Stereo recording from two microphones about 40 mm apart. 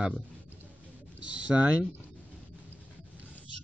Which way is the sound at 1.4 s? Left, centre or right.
Right.